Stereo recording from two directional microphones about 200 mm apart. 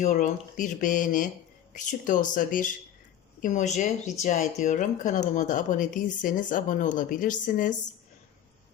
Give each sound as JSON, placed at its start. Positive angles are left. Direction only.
{"t": 0.0, "sound": "speech", "side_deg": 40}